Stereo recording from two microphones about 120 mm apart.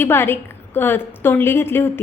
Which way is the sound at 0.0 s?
20° left (ahead or behind).